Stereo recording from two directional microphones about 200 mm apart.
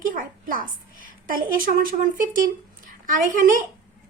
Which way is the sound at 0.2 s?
45° right (ahead or behind).